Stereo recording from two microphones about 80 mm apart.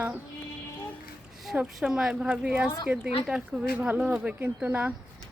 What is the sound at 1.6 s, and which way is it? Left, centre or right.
Speech, centre.